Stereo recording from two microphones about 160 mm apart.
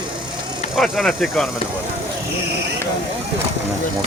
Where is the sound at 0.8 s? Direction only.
Centre (ahead or behind).